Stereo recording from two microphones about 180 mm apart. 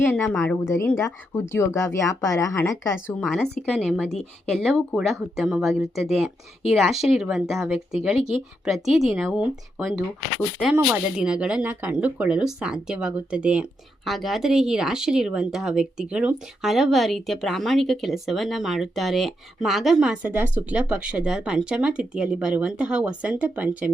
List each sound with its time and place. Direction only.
0.0 s a woman's voice: 10° left (ahead or behind); by 23.9 s 10° right (ahead or behind)